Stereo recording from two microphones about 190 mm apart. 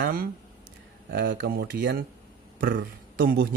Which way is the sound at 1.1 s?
60° right (ahead or behind).